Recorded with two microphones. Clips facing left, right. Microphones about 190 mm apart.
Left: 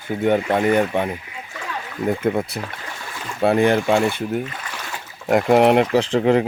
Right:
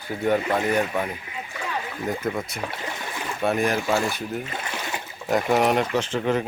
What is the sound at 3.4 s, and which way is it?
Speech, 30° left (ahead or behind).